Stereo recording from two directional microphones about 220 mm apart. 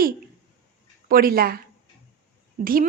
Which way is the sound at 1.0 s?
40° right (ahead or behind).